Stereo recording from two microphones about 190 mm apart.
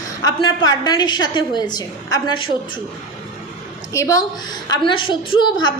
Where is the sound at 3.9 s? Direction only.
15° left (ahead or behind).